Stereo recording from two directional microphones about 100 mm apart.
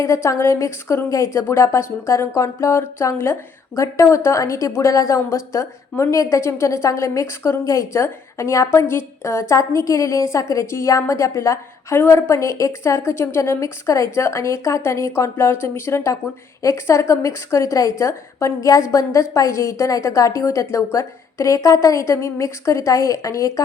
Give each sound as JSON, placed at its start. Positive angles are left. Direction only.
{"t": 0.0, "sound": "a woman's voice", "side_deg": 30}